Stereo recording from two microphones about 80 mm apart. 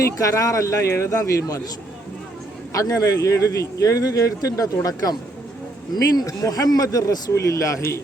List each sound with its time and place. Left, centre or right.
0.2 s speech: left
2.7 s a man's voice: left